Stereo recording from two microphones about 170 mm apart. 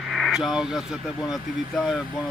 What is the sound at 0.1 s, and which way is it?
Speech, centre (ahead or behind).